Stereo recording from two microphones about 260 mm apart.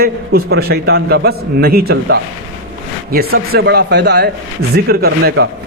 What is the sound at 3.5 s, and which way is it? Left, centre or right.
A man's voice, right.